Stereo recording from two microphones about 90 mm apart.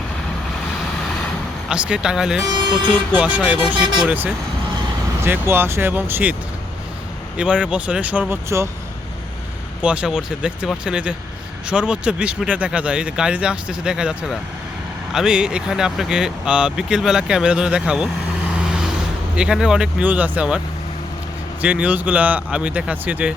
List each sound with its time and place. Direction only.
1.7 s speech: 10° right (ahead or behind)
2.9 s speech: 15° right (ahead or behind)
7.3 s speech: 10° right (ahead or behind)
8.4 s speech: 30° right (ahead or behind)
9.8 s speech: 15° right (ahead or behind)
18.5 s vehicle: 10° right (ahead or behind)
19.4 s speech: 10° right (ahead or behind)
21.6 s speech: 15° right (ahead or behind)